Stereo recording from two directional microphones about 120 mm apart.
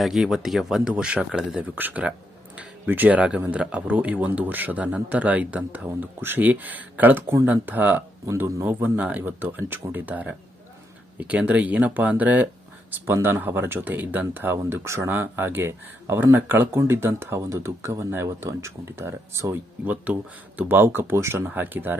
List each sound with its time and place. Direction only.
0.0 s speech: centre (ahead or behind)